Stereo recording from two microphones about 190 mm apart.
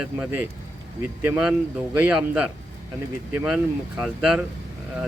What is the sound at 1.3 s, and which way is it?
Speech, 5° right (ahead or behind).